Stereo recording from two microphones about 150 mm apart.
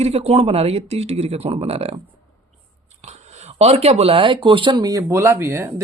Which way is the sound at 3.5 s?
45° right (ahead or behind).